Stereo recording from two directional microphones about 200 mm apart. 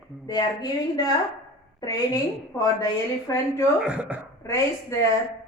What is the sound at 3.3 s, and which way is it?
Speech, 15° left (ahead or behind).